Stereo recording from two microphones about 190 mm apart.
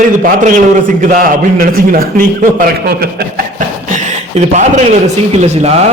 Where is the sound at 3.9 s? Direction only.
40° right (ahead or behind).